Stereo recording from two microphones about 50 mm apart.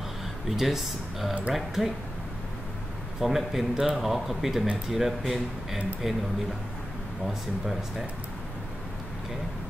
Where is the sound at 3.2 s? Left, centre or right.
Centre.